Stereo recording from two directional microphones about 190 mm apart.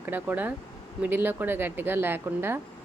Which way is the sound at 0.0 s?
10° right (ahead or behind).